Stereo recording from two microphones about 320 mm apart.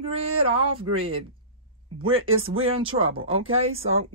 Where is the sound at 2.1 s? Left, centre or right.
Right.